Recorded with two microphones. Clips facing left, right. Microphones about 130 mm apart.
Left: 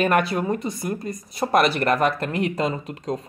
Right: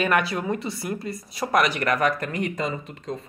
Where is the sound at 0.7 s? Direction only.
20° left (ahead or behind).